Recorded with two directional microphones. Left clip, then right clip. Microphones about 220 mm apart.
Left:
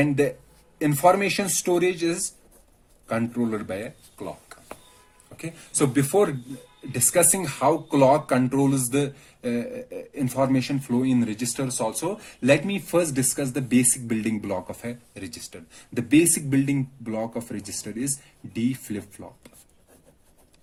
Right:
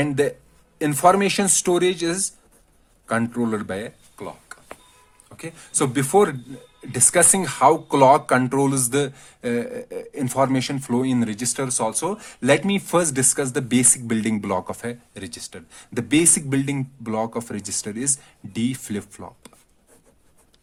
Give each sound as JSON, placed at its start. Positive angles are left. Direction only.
{"t": 0.0, "sound": "speech", "side_deg": -40}